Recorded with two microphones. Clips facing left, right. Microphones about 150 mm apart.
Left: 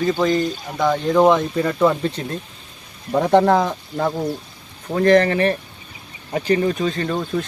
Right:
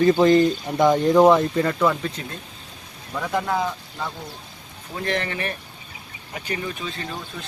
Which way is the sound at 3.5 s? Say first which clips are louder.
Left 7 dB; 55° left (ahead or behind).